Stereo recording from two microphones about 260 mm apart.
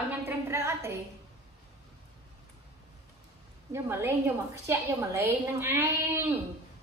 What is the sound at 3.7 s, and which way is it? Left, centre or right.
A woman's voice, centre.